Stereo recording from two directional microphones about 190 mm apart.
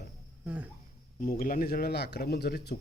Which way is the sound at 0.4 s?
5° right (ahead or behind).